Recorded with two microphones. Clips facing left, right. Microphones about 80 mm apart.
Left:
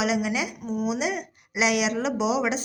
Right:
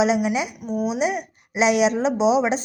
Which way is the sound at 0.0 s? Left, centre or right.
Right.